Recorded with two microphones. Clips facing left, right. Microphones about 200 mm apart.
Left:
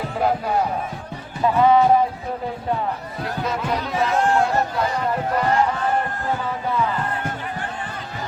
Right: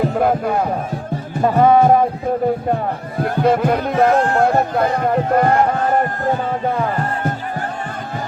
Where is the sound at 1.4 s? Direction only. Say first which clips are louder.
Right 3 dB; 50° right (ahead or behind).